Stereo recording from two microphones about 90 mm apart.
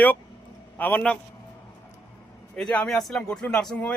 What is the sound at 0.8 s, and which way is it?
Speech, 20° left (ahead or behind).